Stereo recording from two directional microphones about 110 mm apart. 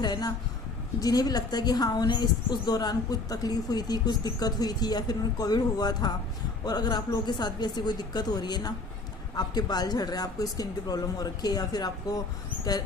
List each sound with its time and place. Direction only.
0.0 s a woman's voice: 35° left (ahead or behind)